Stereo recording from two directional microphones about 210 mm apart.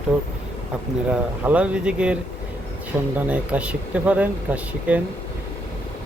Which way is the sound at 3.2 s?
5° right (ahead or behind).